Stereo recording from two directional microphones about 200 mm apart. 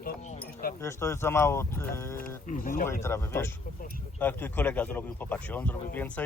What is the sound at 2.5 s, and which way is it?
Speech, 40° left (ahead or behind).